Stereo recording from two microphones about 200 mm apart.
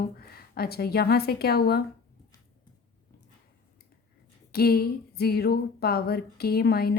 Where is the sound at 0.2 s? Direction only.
50° left (ahead or behind).